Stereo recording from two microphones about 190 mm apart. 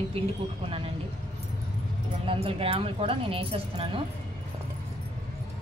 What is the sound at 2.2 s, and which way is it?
Speech, 30° right (ahead or behind).